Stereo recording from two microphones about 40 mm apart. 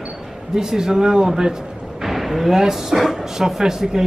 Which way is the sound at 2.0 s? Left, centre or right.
Centre.